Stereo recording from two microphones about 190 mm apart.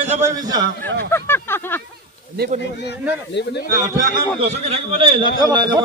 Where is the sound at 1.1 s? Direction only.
10° left (ahead or behind).